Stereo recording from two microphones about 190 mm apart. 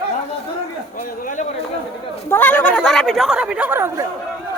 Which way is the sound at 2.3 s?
10° left (ahead or behind).